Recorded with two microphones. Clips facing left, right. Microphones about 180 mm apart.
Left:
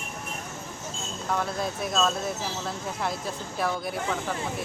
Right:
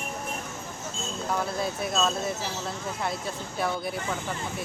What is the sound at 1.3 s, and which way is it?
Speech, centre (ahead or behind).